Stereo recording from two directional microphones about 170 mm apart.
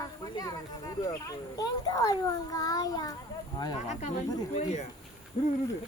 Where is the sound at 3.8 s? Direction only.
40° left (ahead or behind).